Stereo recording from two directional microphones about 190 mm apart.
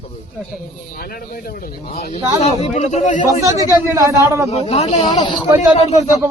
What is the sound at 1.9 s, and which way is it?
A man's voice, 35° left (ahead or behind).